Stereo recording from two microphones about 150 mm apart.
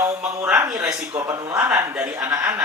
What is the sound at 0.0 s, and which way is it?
Speech, 15° right (ahead or behind).